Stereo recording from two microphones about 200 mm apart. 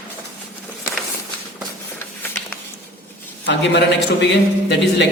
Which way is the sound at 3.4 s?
60° left (ahead or behind).